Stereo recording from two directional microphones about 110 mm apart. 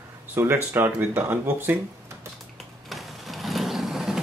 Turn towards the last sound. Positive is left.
turn(degrees=-5)  # may be behind; listen again after turning